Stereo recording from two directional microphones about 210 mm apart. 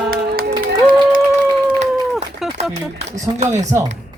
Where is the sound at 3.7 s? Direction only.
15° right (ahead or behind).